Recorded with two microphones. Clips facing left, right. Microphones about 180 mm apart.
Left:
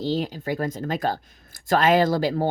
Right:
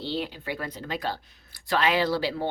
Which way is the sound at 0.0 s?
40° left (ahead or behind).